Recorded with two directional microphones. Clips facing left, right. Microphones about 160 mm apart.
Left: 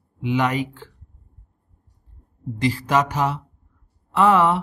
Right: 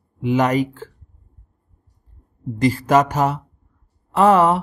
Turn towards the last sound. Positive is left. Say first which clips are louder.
# right 3 dB
turn(degrees=-40)  # may be behind; listen again after turning